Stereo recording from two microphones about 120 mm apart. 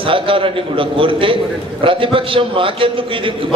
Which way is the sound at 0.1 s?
45° right (ahead or behind).